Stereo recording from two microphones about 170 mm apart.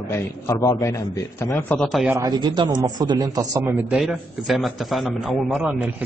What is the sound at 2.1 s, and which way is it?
A man's voice, 20° right (ahead or behind).